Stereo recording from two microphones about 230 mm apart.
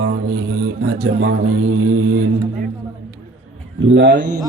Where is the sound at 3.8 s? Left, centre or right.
Right.